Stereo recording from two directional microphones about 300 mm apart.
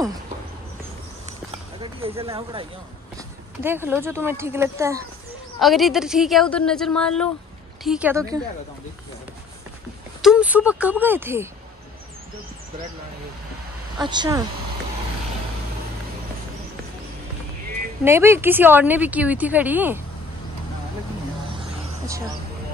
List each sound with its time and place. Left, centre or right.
1.8 s speech: centre
3.6 s a woman's voice: centre
10.2 s speech: centre
14.0 s speech: centre
18.0 s speech: centre